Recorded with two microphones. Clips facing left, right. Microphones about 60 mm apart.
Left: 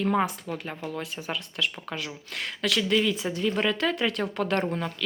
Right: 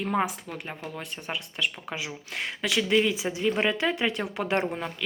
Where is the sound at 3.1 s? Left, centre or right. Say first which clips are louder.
Even; centre.